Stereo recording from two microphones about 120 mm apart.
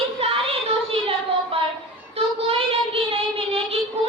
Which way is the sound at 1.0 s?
50° right (ahead or behind).